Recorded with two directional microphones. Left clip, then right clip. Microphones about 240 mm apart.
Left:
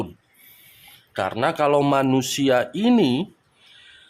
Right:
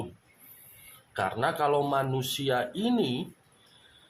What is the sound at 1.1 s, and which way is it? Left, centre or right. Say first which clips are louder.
Speech: left 6 dB; left.